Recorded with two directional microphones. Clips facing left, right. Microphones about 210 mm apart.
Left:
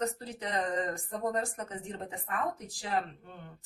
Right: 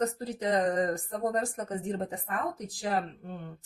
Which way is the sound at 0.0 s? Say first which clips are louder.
Right 5 dB; 40° right (ahead or behind).